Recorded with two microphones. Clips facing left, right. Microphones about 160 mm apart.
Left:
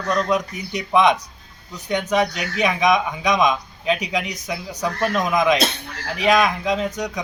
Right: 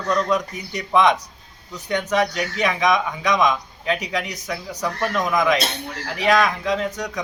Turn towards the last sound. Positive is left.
turn(degrees=15)  # may be behind; listen again after turning